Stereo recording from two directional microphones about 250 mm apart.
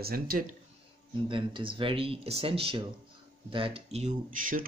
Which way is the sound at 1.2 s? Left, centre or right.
Centre.